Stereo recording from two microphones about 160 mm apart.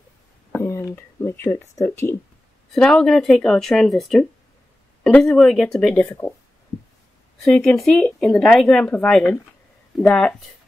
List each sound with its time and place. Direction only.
0.6 s speech: 20° left (ahead or behind)
2.7 s speech: 5° left (ahead or behind)
7.4 s speech: 5° left (ahead or behind)